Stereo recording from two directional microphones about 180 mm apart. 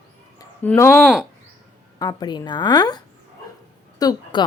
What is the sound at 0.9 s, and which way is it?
Speech, 5° right (ahead or behind).